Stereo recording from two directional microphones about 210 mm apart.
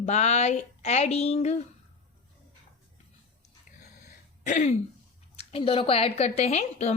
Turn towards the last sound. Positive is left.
turn(degrees=30)  # may be behind; listen again after turning